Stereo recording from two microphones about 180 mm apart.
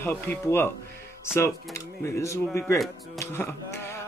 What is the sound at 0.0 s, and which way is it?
Speech, 10° left (ahead or behind).